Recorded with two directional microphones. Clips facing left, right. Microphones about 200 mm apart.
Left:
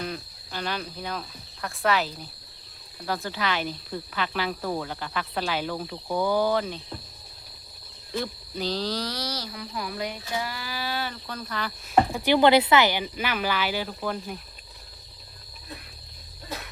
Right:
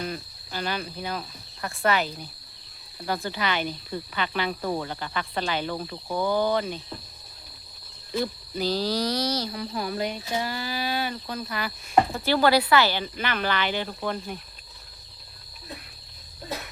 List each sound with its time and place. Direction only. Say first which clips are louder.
0.0 s speech: right 1 dB; centre (ahead or behind)
8.1 s speech: right 3 dB; 5° right (ahead or behind); by 9.5 s 20° right (ahead or behind)
9.5 s speech: right 4 dB; 35° right (ahead or behind); by 11.7 s 10° right (ahead or behind)
12.1 s speech: left 2 dB; 15° left (ahead or behind)